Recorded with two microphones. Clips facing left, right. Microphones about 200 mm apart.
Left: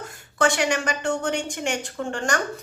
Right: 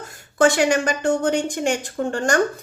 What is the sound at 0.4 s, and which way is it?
A woman's voice, 40° right (ahead or behind).